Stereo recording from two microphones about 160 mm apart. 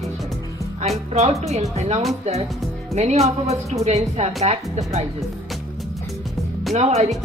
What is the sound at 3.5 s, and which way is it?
A woman's voice, 45° right (ahead or behind).